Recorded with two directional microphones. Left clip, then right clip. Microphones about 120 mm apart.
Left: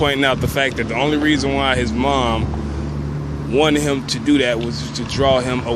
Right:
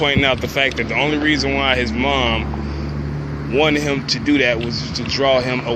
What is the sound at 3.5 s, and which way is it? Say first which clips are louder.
Speech: even; 35° left (ahead or behind).